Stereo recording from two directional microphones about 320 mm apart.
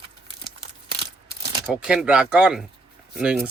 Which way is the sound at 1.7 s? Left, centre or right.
Centre.